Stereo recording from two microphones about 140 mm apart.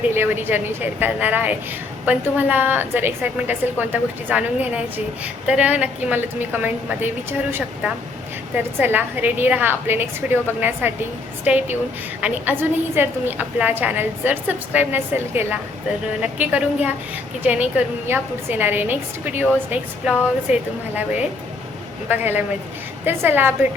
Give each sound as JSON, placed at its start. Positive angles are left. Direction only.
{"t": 0.1, "sound": "a woman's voice", "side_deg": -15}
{"t": 20.5, "sound": "a woman's voice", "side_deg": -10}